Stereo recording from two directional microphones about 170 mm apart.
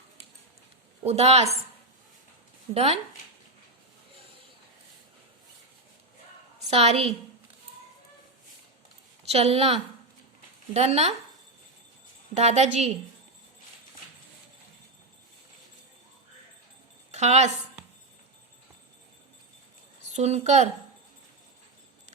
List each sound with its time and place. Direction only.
1.0 s a woman's voice: 40° right (ahead or behind)
2.7 s a woman's voice: 35° right (ahead or behind)
6.7 s a woman's voice: 35° right (ahead or behind)
9.2 s a woman's voice: 35° right (ahead or behind)
10.8 s a woman's voice: 35° right (ahead or behind)
12.4 s a woman's voice: 40° right (ahead or behind)
17.1 s speech: 40° right (ahead or behind)
20.1 s a woman's voice: 40° right (ahead or behind)